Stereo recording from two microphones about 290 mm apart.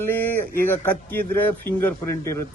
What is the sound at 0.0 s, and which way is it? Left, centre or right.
Speech, centre.